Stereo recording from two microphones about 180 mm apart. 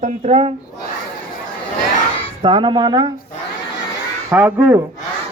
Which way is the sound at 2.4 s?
25° right (ahead or behind).